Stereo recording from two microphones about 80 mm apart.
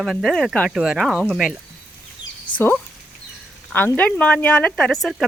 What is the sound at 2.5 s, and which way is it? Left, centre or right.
Speech, centre.